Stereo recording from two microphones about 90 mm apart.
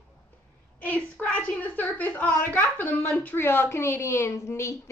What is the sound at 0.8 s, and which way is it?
A woman's voice, 20° left (ahead or behind).